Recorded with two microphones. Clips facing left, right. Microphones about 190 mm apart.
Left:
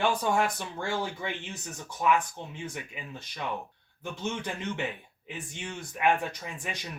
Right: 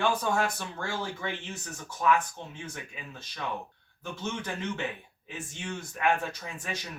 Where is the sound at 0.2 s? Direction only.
15° left (ahead or behind).